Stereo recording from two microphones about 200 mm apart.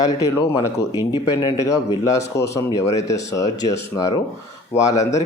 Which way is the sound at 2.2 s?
15° left (ahead or behind).